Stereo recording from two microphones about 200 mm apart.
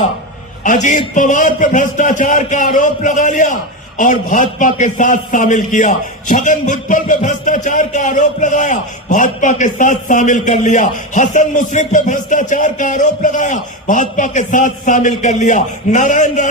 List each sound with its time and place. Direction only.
0.6 s a man's voice: 35° left (ahead or behind)